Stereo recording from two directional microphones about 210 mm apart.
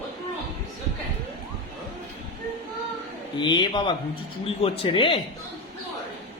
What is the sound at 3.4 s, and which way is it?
Speech, 20° left (ahead or behind).